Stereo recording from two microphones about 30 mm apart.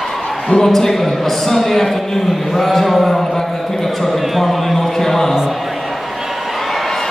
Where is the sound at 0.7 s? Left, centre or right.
Centre.